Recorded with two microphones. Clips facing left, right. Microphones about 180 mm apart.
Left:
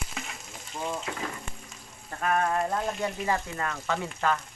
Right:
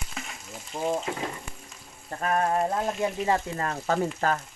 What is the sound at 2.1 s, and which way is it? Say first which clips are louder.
Speech: right 1 dB; 35° right (ahead or behind).